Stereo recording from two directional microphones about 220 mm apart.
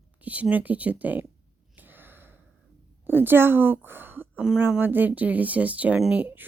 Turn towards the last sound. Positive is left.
turn(degrees=-10)  # may be behind; listen again after turning